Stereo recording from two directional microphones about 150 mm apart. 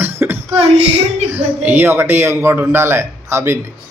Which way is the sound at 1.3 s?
10° right (ahead or behind).